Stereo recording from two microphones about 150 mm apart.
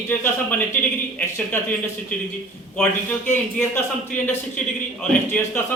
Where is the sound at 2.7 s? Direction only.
10° left (ahead or behind).